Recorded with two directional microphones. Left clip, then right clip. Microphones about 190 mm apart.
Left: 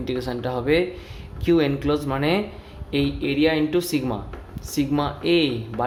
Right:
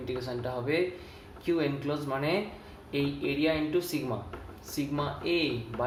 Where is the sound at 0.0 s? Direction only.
60° left (ahead or behind).